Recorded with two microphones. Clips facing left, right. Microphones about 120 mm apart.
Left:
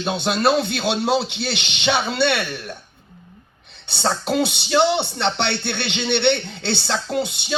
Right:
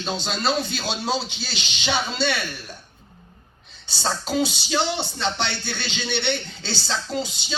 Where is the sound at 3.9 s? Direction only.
60° left (ahead or behind).